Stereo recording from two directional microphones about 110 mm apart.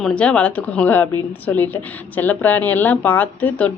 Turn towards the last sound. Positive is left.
turn(degrees=15)  # may be behind; listen again after turning